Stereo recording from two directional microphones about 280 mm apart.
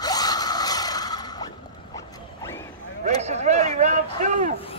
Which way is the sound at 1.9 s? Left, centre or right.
Centre.